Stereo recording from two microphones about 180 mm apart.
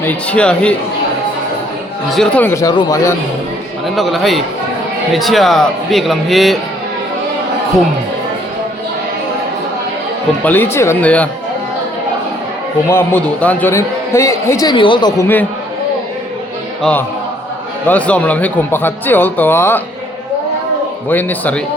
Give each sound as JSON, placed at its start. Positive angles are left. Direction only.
{"t": 0.0, "sound": "a man's voice", "side_deg": 10}
{"t": 2.0, "sound": "a man's voice", "side_deg": 5}
{"t": 3.9, "sound": "a man's voice", "side_deg": 0}
{"t": 10.4, "sound": "a man's voice", "side_deg": 10}
{"t": 12.9, "sound": "a man's voice", "side_deg": 10}
{"t": 15.2, "sound": "a man's voice", "side_deg": 10}
{"t": 17.8, "sound": "a man's voice", "side_deg": 10}
{"t": 21.1, "sound": "a man's voice", "side_deg": 10}